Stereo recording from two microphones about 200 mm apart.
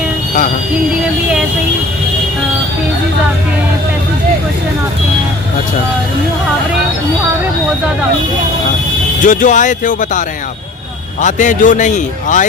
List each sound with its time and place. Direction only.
9.2 s a man's voice: 40° left (ahead or behind)